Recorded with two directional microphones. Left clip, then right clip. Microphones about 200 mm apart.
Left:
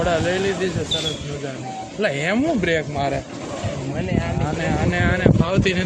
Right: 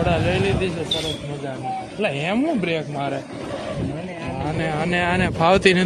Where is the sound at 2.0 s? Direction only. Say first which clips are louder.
Left 2 dB; 5° left (ahead or behind).